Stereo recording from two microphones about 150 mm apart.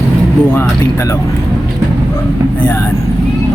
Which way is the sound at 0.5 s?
15° left (ahead or behind).